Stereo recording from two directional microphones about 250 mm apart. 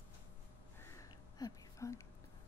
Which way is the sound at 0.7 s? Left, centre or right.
Centre.